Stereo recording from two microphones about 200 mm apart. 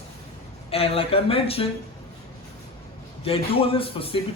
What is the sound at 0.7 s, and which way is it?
Speech, 30° left (ahead or behind).